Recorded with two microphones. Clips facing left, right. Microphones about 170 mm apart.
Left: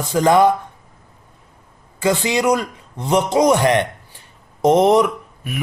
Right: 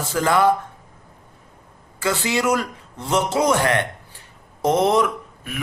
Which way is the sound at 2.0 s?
15° left (ahead or behind).